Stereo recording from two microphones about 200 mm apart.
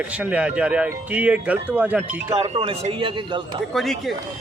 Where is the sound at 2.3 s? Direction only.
30° right (ahead or behind).